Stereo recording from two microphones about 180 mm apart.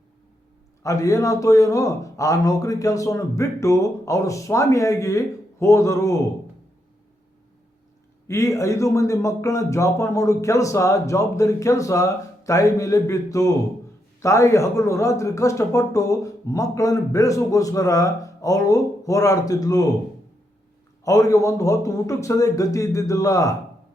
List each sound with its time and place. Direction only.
0.8 s a man's voice: 15° left (ahead or behind)
8.3 s a man's voice: 15° left (ahead or behind)
21.0 s a man's voice: 20° left (ahead or behind)